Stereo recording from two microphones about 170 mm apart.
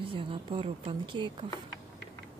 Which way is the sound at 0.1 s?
30° right (ahead or behind).